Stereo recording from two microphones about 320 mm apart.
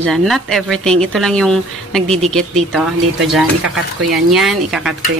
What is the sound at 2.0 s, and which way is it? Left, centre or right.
Speech, centre.